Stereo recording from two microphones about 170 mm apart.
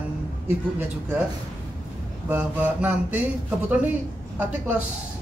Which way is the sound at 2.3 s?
10° right (ahead or behind).